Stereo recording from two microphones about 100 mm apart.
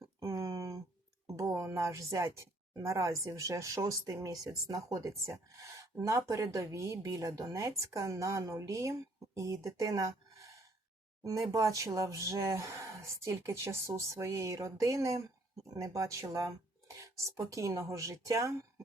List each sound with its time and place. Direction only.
0.2 s a sound: 30° right (ahead or behind)
1.4 s speech: 30° right (ahead or behind)
11.2 s speech: 35° right (ahead or behind)